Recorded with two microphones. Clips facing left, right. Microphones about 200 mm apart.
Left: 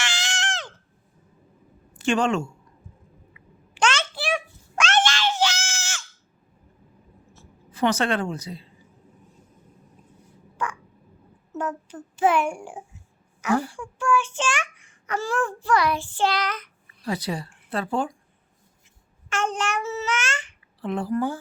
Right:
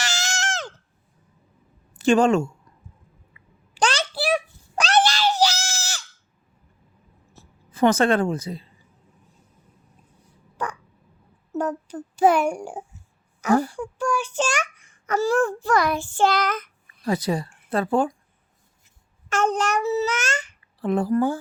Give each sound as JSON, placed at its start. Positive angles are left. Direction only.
{"t": 0.0, "sound": "a sound", "side_deg": -45}
{"t": 2.0, "sound": "a woman's voice", "side_deg": -40}
{"t": 3.8, "sound": "a sound", "side_deg": -35}
{"t": 4.8, "sound": "screaming", "side_deg": -35}
{"t": 7.7, "sound": "a woman's voice", "side_deg": -50}
{"t": 10.6, "sound": "crow", "side_deg": -40}
{"t": 11.5, "sound": "a child's voice", "side_deg": -40}
{"t": 19.3, "sound": "a child's voice", "side_deg": -40}